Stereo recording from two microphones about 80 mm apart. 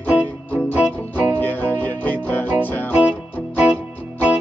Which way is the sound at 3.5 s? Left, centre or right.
Centre.